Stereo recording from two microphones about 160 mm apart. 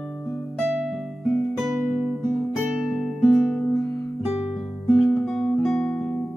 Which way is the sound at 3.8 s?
20° left (ahead or behind).